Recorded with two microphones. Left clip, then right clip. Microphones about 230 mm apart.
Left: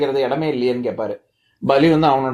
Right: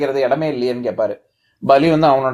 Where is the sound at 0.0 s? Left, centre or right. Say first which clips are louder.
Right 2 dB; right.